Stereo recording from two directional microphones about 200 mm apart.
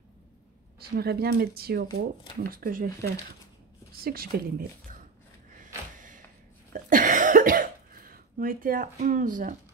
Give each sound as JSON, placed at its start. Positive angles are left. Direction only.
{"t": 0.7, "sound": "speech", "side_deg": -50}
{"t": 5.6, "sound": "a sound", "side_deg": -40}
{"t": 6.7, "sound": "cough", "side_deg": -45}